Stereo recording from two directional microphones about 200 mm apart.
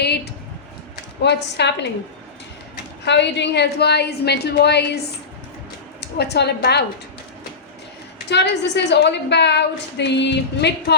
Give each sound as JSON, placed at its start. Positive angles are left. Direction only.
{"t": 1.2, "sound": "a woman's voice", "side_deg": 60}
{"t": 3.0, "sound": "a woman's voice", "side_deg": 60}
{"t": 6.1, "sound": "a woman's voice", "side_deg": 55}
{"t": 8.3, "sound": "a woman's voice", "side_deg": 60}